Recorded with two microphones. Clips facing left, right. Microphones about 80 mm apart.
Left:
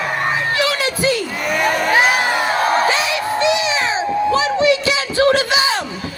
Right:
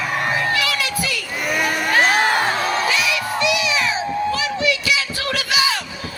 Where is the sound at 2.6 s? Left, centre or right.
Left.